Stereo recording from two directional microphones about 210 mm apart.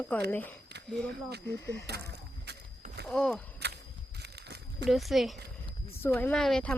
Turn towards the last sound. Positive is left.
turn(degrees=5)  # may be behind; listen again after turning